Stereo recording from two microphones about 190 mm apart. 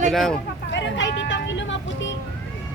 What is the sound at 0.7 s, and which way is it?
Speech, 70° left (ahead or behind).